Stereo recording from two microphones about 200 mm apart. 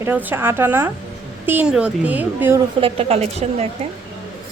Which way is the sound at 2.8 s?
30° right (ahead or behind).